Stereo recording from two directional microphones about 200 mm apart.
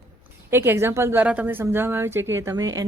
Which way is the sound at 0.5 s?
10° right (ahead or behind).